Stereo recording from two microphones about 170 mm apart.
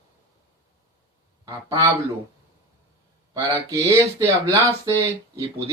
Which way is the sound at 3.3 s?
20° right (ahead or behind).